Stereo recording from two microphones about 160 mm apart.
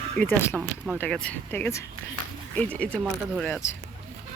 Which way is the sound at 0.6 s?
10° right (ahead or behind).